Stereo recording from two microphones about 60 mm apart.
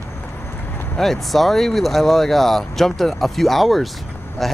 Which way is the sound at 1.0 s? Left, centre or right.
Centre.